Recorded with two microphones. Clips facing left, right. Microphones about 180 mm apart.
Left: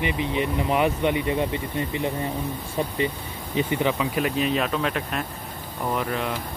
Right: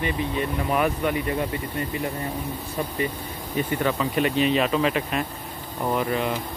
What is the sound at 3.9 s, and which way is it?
Speech, 5° left (ahead or behind).